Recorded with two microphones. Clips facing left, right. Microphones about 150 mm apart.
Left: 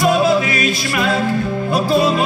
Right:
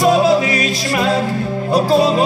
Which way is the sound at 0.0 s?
35° right (ahead or behind).